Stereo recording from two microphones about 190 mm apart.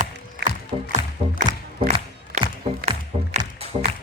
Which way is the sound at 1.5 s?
20° right (ahead or behind).